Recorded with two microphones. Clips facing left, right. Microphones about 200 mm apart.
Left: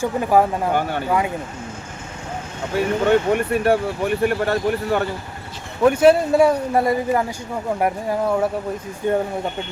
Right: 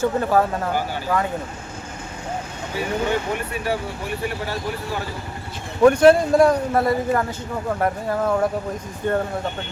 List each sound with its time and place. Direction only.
0.0 s speech: 15° left (ahead or behind)
0.7 s speech: 60° left (ahead or behind)
2.7 s speech: 55° left (ahead or behind)
5.8 s speech: 5° left (ahead or behind)